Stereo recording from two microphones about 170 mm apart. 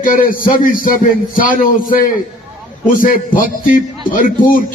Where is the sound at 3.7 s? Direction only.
55° left (ahead or behind).